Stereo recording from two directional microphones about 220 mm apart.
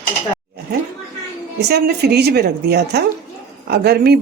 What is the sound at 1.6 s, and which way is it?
Speech, 45° right (ahead or behind).